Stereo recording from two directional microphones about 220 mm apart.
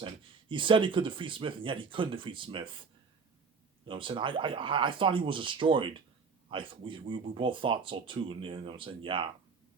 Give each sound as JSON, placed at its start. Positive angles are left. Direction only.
{"t": 0.0, "sound": "speech", "side_deg": -20}
{"t": 3.8, "sound": "speech", "side_deg": -20}